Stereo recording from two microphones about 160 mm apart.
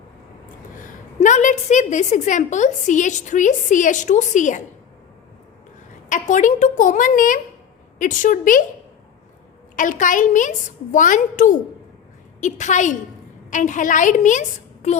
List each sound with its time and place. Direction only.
0.9 s a woman's voice: 50° left (ahead or behind)
6.1 s a woman's voice: 50° left (ahead or behind)
9.7 s a woman's voice: 55° left (ahead or behind)